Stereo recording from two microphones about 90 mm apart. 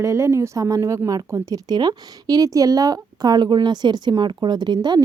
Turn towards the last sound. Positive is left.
turn(degrees=-50)  # may be behind; listen again after turning